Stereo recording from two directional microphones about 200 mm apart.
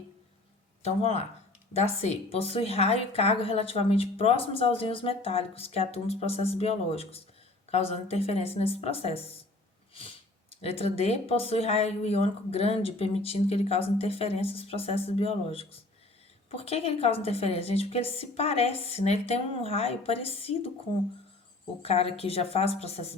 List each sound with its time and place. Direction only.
0.8 s a woman's voice: 30° left (ahead or behind)
10.5 s speech: 30° left (ahead or behind)
21.8 s speech: 30° left (ahead or behind)